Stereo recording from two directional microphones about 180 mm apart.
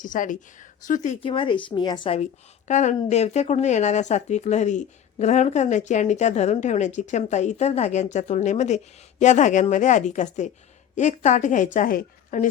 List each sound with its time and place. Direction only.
0.0 s a woman's voice: 45° left (ahead or behind)
1.3 s a woman's voice: 30° left (ahead or behind)
2.6 s a woman's voice: 40° left (ahead or behind)